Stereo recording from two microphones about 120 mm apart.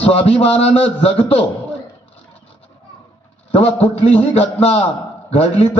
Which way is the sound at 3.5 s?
55° left (ahead or behind).